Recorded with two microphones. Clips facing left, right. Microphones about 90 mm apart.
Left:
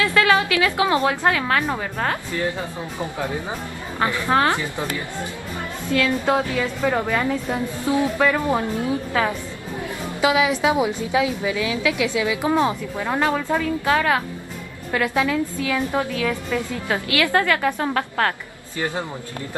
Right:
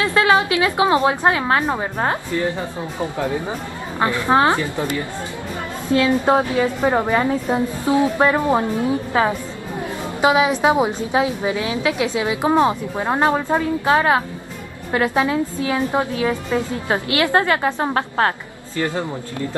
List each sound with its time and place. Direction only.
0.0 s speech: 25° right (ahead or behind)
4.0 s a woman's voice: 20° right (ahead or behind)
5.9 s a woman's voice: 25° right (ahead or behind)